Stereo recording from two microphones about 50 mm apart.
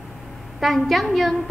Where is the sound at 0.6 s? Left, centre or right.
Centre.